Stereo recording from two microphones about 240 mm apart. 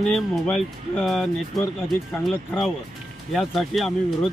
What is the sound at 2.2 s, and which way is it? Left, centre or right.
Speech, centre.